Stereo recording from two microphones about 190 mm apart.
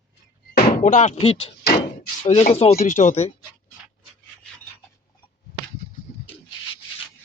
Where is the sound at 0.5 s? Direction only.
45° left (ahead or behind).